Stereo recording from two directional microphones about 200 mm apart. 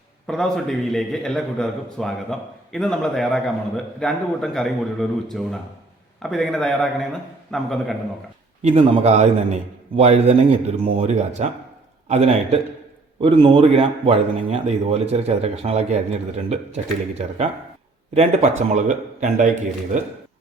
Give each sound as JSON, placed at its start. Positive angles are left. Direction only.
{"t": 0.3, "sound": "a man's voice", "side_deg": 5}
{"t": 8.6, "sound": "a man's voice", "side_deg": -35}
{"t": 18.7, "sound": "a man's voice", "side_deg": -40}